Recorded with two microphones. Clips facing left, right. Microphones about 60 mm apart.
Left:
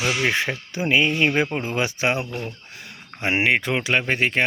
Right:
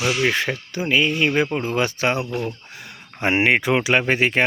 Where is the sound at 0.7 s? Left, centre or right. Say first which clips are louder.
Even; centre.